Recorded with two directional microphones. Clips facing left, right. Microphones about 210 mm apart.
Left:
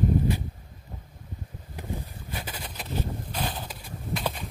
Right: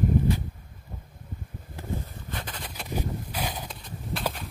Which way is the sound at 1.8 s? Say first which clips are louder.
Right 1 dB; 15° left (ahead or behind).